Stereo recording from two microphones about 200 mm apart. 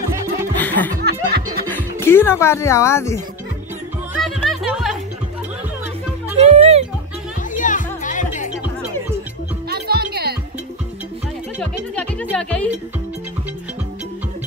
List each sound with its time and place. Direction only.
0.1 s music: 15° right (ahead or behind)
0.6 s music: 10° left (ahead or behind)
1.0 s music: 50° right (ahead or behind)
2.0 s speech: 10° left (ahead or behind)
4.2 s music: centre (ahead or behind)
6.4 s music: 30° right (ahead or behind)
7.5 s music: 40° left (ahead or behind)
9.7 s music: 50° right (ahead or behind)
11.6 s speech: 5° left (ahead or behind)